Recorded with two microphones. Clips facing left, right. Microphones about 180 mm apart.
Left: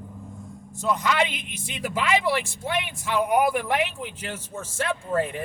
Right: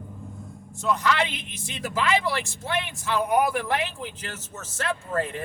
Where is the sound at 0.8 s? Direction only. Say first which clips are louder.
Left 1 dB; 15° left (ahead or behind).